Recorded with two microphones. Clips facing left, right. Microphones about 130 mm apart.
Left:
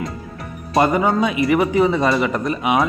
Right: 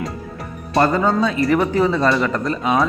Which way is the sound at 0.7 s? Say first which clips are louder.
Even; 15° left (ahead or behind).